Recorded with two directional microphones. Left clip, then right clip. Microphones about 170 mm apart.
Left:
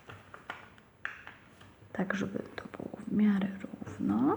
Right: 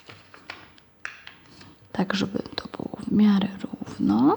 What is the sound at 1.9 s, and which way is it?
Speech, 45° right (ahead or behind).